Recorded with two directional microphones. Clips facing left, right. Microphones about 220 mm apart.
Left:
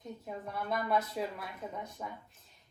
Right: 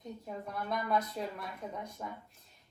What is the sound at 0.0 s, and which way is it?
A woman's voice, centre (ahead or behind).